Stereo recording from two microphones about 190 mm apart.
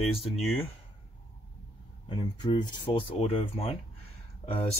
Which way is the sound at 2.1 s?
25° left (ahead or behind).